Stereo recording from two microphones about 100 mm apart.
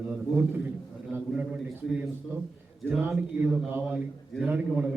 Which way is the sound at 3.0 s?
15° right (ahead or behind).